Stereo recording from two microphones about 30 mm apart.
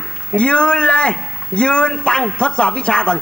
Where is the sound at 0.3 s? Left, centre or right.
Left.